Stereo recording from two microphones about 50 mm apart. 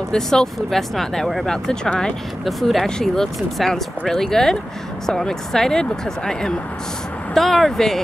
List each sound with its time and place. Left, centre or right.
0.1 s speech: centre